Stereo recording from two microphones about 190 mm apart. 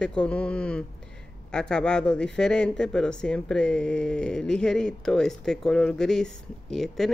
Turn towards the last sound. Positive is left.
turn(degrees=0)  # may be behind; listen again after turning